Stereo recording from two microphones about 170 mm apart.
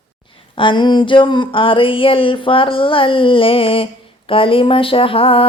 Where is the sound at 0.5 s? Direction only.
30° left (ahead or behind).